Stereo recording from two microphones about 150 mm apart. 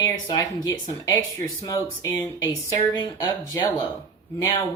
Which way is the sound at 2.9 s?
25° left (ahead or behind).